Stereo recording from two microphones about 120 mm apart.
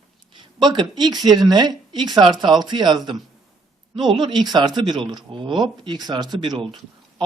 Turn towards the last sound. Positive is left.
turn(degrees=-35)  # may be behind; listen again after turning